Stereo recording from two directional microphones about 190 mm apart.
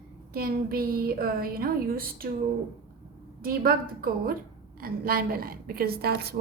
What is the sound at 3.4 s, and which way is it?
A woman's voice, 50° right (ahead or behind).